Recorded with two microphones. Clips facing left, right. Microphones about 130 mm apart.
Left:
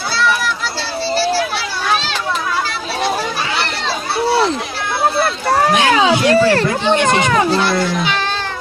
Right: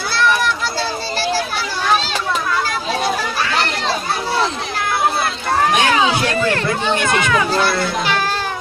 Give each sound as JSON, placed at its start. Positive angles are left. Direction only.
{"t": 5.9, "sound": "a sound", "side_deg": 35}
{"t": 6.9, "sound": "speech", "side_deg": 25}
{"t": 7.6, "sound": "a child's voice", "side_deg": 0}